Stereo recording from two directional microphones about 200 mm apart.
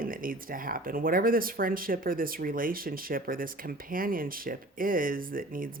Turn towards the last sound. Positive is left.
turn(degrees=-45)  # may be behind; listen again after turning